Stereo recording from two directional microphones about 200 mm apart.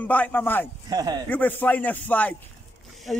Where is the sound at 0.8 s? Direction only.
20° right (ahead or behind).